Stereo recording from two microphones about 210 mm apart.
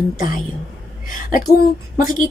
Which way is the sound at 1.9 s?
40° left (ahead or behind).